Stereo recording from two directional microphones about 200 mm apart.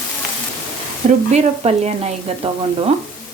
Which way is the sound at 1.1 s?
35° right (ahead or behind).